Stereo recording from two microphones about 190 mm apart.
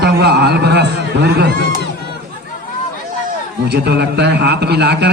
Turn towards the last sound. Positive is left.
turn(degrees=-60)  # may be behind; listen again after turning